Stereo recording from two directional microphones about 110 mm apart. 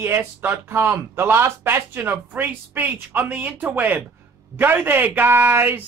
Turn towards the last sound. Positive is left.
turn(degrees=-20)  # may be behind; listen again after turning